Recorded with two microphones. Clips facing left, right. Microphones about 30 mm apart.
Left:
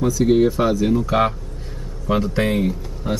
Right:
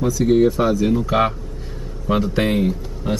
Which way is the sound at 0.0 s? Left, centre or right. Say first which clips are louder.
Even; centre.